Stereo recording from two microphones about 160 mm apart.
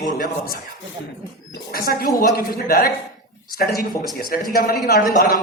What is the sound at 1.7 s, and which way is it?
Speech, 65° left (ahead or behind).